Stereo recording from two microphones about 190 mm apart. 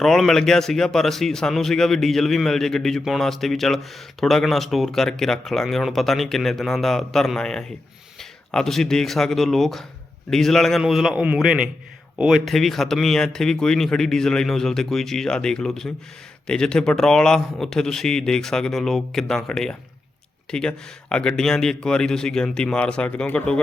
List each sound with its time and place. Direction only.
0.0 s speech: centre (ahead or behind)